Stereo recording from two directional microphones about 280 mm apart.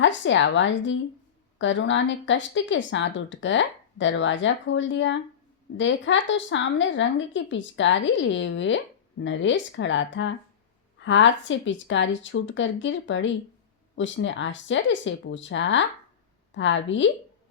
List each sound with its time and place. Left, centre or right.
0.0 s a woman's voice: left